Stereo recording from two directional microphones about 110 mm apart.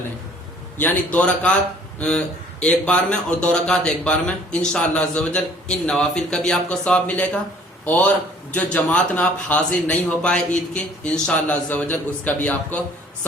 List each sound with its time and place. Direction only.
0.8 s a man's voice: 15° left (ahead or behind)